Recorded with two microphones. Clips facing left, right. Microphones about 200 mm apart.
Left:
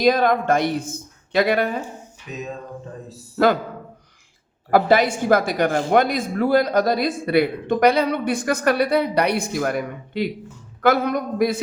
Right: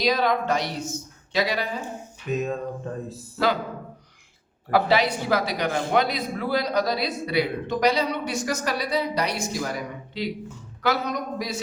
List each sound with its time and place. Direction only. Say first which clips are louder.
0.0 s a woman's voice: left 5 dB; 50° left (ahead or behind)
3.3 s a woman's voice: left 6 dB; 50° left (ahead or behind)
4.7 s a woman's voice: left 4 dB; 50° left (ahead or behind)